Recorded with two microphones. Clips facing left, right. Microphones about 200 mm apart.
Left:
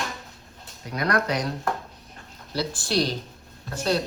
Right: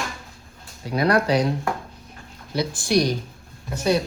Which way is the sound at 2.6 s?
15° right (ahead or behind).